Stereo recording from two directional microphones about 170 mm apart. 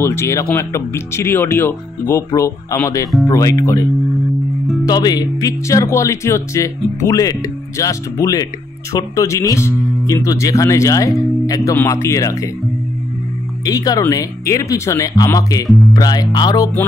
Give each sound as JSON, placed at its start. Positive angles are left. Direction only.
{"t": 0.0, "sound": "speech", "side_deg": 15}
{"t": 4.8, "sound": "speech", "side_deg": 25}
{"t": 13.7, "sound": "speech", "side_deg": 20}